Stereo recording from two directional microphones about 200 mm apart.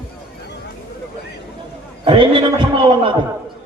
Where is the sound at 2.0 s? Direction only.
25° right (ahead or behind).